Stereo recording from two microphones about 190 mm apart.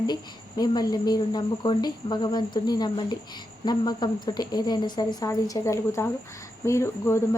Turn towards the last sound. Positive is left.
turn(degrees=15)  # may be behind; listen again after turning